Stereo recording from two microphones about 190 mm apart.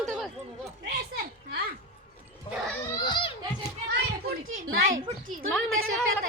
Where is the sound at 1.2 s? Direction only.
55° right (ahead or behind).